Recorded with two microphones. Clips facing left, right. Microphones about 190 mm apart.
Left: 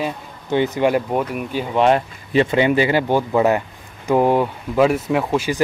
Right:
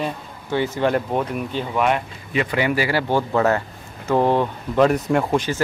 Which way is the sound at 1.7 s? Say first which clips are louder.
Left 6 dB; 30° left (ahead or behind).